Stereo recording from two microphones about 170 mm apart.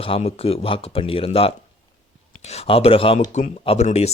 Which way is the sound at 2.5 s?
35° left (ahead or behind).